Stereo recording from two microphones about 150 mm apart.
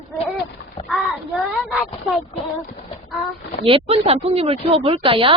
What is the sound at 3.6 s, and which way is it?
Speech, 40° right (ahead or behind).